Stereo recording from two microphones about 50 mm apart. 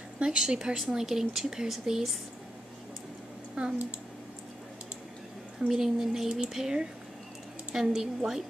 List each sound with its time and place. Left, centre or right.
0.2 s a woman's voice: centre
3.5 s speech: right
5.7 s a woman's voice: centre